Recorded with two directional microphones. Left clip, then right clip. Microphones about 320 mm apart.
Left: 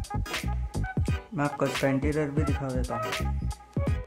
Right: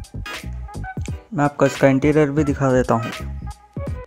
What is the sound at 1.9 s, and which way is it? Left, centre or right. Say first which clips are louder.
Speech: right 12 dB; right.